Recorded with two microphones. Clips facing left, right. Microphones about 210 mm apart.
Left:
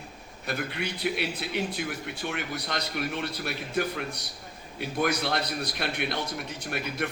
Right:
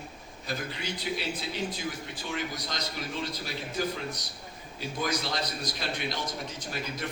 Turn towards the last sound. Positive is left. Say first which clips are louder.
# left 4 dB
turn(degrees=60)  # may be behind; listen again after turning